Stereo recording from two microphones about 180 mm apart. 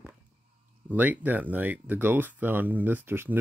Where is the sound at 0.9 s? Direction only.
10° right (ahead or behind).